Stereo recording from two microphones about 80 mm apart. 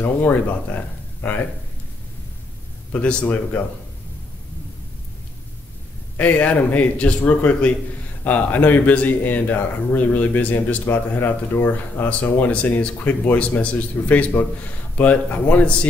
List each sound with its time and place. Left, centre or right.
0.0 s speech: left
2.9 s speech: centre
6.1 s speech: left